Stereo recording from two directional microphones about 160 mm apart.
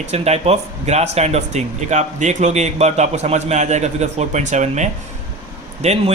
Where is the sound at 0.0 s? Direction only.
40° right (ahead or behind).